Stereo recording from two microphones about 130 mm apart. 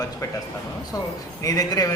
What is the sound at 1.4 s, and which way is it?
Speech, 25° left (ahead or behind).